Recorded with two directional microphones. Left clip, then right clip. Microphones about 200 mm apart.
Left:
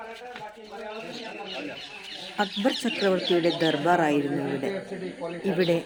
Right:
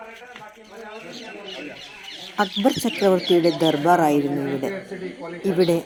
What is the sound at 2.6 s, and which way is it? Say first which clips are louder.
Speech: right 5 dB; 20° right (ahead or behind).